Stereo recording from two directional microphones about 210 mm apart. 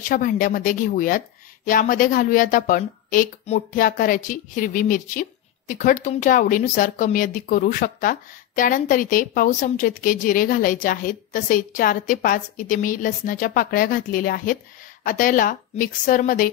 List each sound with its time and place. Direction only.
0.1 s speech: 40° left (ahead or behind)